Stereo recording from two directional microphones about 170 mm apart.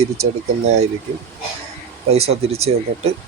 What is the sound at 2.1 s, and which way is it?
Speech, 35° right (ahead or behind).